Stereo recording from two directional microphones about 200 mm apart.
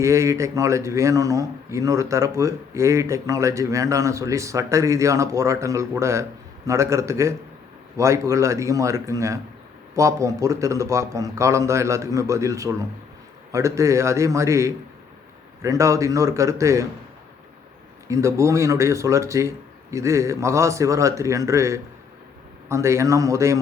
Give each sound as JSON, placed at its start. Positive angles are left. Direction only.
{"t": 0.0, "sound": "speech", "side_deg": -15}
{"t": 18.1, "sound": "speech", "side_deg": -15}